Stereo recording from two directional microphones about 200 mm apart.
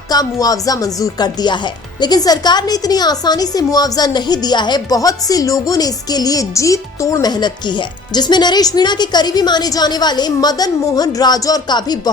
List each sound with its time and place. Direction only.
0.1 s speech: 20° left (ahead or behind)